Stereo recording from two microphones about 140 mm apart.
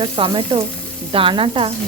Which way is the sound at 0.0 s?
40° right (ahead or behind).